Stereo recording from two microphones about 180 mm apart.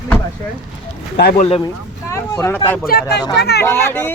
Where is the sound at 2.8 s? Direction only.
60° left (ahead or behind).